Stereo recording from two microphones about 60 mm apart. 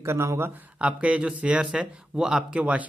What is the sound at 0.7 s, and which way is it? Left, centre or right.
Speech, right.